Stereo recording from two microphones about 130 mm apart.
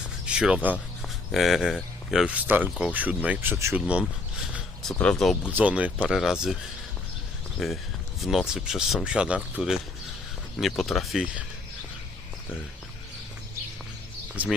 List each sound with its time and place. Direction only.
0.3 s speech: 10° right (ahead or behind)
3.8 s speech: 10° right (ahead or behind)
4.9 s speech: 5° left (ahead or behind)
5.5 s speech: 10° right (ahead or behind)
7.6 s speech: centre (ahead or behind)
14.4 s speech: 10° right (ahead or behind)